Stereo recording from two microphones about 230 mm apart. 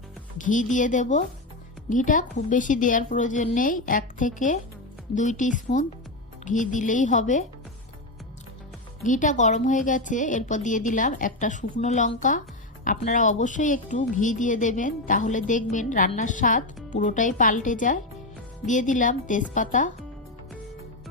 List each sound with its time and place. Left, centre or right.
0.3 s a woman's voice: left
9.0 s a woman's voice: left